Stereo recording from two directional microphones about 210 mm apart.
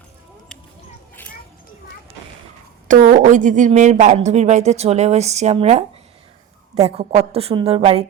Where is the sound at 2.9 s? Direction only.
35° right (ahead or behind).